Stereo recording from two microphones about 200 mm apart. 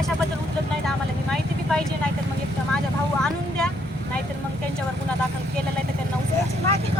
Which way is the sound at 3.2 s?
5° left (ahead or behind).